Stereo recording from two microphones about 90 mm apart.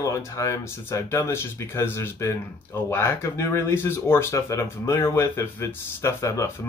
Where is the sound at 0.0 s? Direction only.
35° left (ahead or behind).